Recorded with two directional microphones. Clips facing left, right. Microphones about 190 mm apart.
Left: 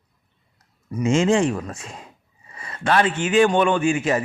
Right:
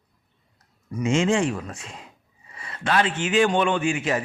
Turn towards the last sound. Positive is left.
turn(degrees=40)  # may be behind; listen again after turning